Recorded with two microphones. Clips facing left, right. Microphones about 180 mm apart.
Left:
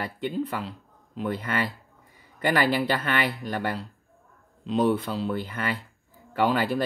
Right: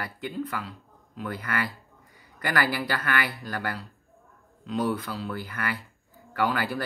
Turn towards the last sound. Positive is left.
turn(degrees=20)  # may be behind; listen again after turning